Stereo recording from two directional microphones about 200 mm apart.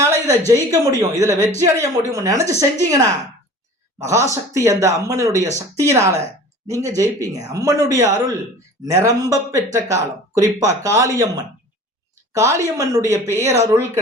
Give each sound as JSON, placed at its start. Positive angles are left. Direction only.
{"t": 0.0, "sound": "speech", "side_deg": -15}